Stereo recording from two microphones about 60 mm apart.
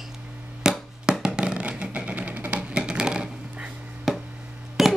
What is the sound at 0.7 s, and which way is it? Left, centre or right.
Music, centre.